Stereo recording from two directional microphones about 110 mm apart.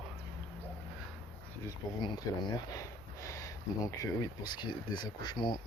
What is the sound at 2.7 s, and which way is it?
Speech, 30° left (ahead or behind).